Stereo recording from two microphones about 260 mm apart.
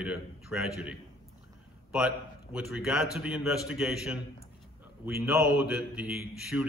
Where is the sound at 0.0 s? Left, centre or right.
Centre.